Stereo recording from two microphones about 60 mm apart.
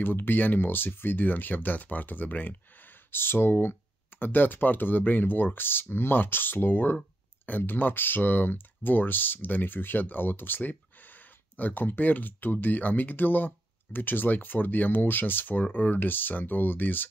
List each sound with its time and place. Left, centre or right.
0.0 s speech: left